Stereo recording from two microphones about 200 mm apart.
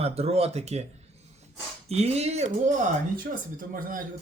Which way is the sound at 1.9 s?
30° right (ahead or behind).